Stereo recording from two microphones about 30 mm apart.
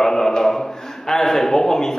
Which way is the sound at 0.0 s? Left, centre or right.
Centre.